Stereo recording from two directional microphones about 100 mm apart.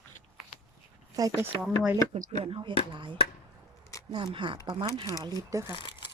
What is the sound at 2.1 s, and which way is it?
Speech, 80° right.